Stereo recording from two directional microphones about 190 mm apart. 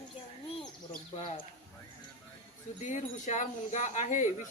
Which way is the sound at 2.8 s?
40° left (ahead or behind).